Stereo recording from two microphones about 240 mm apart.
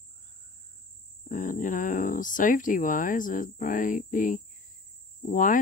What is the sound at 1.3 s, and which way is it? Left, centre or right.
Speech, left.